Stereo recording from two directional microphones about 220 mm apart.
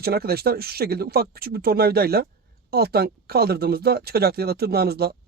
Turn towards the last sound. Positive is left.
turn(degrees=-45)  # may be behind; listen again after turning